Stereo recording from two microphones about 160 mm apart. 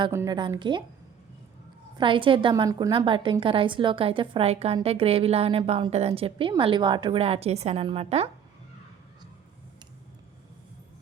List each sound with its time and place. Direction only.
0.1 s a woman's voice: 15° right (ahead or behind)
0.3 s a woman's voice: 30° right (ahead or behind)
2.0 s a woman's voice: 30° right (ahead or behind)
2.6 s a woman's voice: 20° right (ahead or behind)
2.9 s a woman's voice: 30° right (ahead or behind)